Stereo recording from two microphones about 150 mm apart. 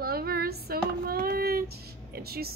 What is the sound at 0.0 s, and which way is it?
Child singing, 90° right.